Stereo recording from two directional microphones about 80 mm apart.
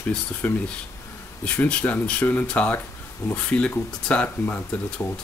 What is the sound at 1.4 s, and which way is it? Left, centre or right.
Speech, centre.